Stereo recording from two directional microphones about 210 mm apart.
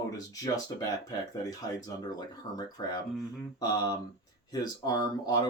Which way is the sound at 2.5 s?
20° left (ahead or behind).